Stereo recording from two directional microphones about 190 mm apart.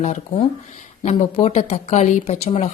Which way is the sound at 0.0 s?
35° left (ahead or behind).